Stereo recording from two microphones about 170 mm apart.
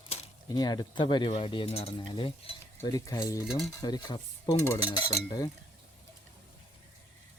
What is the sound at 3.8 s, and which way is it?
Speech, 25° left (ahead or behind).